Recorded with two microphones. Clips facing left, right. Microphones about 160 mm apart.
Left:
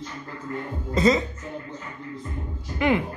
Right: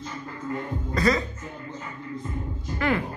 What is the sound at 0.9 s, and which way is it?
Speech, 20° left (ahead or behind).